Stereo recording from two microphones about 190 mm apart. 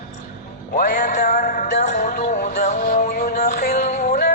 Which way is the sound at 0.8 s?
50° left (ahead or behind).